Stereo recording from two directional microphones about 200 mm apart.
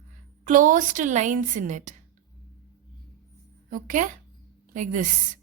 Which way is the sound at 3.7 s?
40° right (ahead or behind).